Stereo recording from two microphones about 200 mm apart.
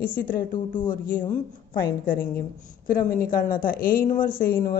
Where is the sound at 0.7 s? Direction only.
25° left (ahead or behind).